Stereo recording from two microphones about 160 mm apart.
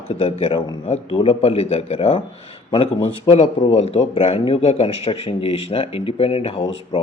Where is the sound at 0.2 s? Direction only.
35° left (ahead or behind).